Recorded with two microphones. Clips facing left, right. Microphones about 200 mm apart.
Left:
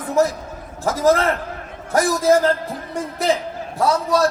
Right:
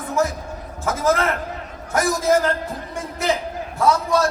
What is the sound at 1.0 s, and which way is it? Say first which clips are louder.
Speech: left 4 dB; 35° left (ahead or behind).